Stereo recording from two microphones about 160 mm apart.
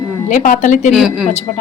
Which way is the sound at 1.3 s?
45° left (ahead or behind).